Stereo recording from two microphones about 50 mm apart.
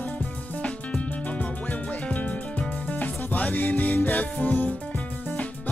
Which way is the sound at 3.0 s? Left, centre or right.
Left.